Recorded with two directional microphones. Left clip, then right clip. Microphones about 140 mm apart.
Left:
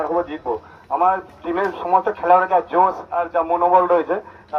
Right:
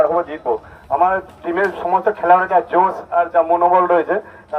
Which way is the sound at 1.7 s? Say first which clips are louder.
Right 1 dB; 45° right (ahead or behind).